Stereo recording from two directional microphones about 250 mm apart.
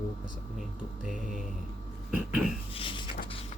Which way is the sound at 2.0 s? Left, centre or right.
Centre.